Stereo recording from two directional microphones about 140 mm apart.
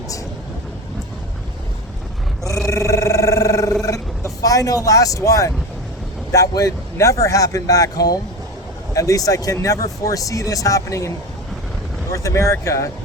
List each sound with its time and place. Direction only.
2.6 s roar: 20° left (ahead or behind)
6.3 s speech: 25° left (ahead or behind)
12.1 s speech: 25° left (ahead or behind)